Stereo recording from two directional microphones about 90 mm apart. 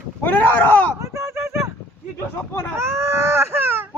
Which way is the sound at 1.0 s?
30° right (ahead or behind).